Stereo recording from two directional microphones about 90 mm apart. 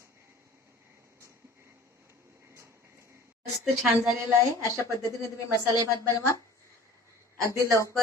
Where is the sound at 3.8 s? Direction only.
15° right (ahead or behind).